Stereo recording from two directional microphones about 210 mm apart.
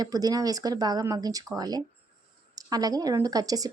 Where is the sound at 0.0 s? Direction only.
15° right (ahead or behind).